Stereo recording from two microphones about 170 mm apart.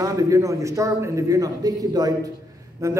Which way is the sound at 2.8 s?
20° right (ahead or behind).